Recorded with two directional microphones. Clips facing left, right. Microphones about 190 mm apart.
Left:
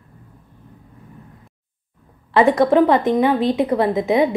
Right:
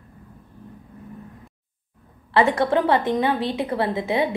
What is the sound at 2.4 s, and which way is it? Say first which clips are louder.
A woman's voice: left 5 dB; 15° left (ahead or behind).